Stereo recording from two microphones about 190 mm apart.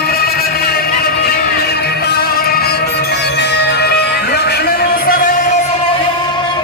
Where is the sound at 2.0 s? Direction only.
55° left (ahead or behind).